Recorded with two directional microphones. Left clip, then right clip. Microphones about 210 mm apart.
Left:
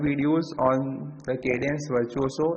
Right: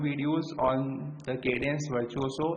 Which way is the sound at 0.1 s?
20° left (ahead or behind).